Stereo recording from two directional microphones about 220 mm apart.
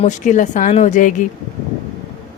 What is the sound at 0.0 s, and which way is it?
A woman's voice, 35° left (ahead or behind).